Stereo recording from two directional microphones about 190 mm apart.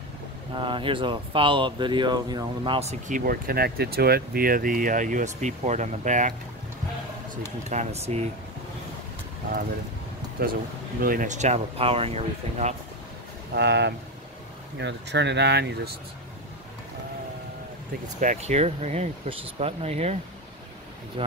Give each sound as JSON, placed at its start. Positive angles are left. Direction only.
{"t": 0.6, "sound": "speech", "side_deg": -25}
{"t": 7.7, "sound": "speech", "side_deg": -35}
{"t": 10.4, "sound": "speech", "side_deg": -50}
{"t": 13.6, "sound": "speech", "side_deg": -65}
{"t": 18.2, "sound": "speech", "side_deg": -40}